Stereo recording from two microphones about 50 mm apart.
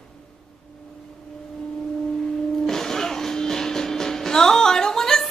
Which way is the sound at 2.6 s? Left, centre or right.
Centre.